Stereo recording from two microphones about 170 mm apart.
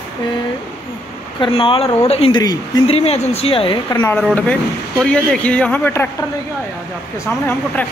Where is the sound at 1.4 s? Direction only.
30° left (ahead or behind).